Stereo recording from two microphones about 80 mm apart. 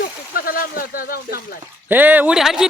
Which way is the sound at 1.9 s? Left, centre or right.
Right.